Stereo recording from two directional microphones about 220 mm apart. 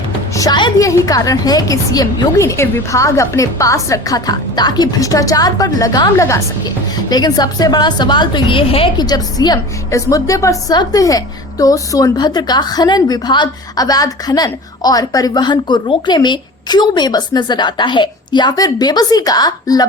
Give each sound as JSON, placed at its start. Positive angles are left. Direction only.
{"t": 0.3, "sound": "a woman's voice", "side_deg": 20}